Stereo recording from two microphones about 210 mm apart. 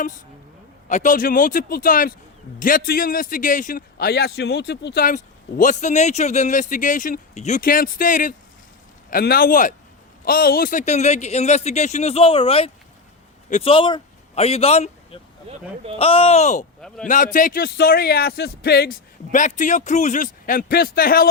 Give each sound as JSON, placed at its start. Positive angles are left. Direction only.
{"t": 0.9, "sound": "a man's voice", "side_deg": 35}